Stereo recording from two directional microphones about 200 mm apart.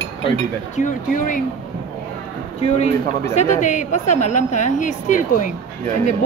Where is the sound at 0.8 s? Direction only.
40° left (ahead or behind).